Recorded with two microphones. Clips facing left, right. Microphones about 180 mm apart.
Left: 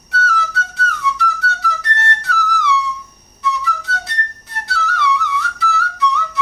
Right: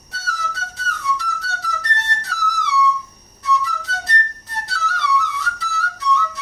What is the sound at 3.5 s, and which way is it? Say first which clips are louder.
Flute: even; 60° left (ahead or behind).